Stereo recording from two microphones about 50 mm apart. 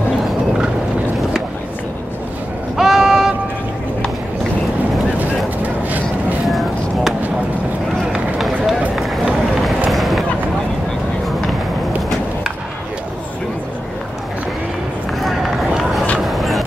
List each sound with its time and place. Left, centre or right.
2.8 s a sound: centre
5.6 s vehicle: right
8.1 s run: centre
16.3 s music: centre